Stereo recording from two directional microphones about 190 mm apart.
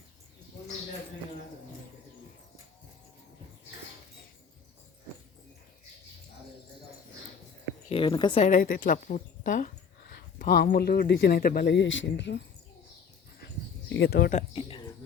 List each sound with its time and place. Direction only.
7.9 s a woman's voice: 25° left (ahead or behind)
8.4 s a woman's voice: 45° left (ahead or behind); by 12.4 s 65° left (ahead or behind)
13.9 s a man's voice: 60° left (ahead or behind)
14.3 s speech: 25° left (ahead or behind)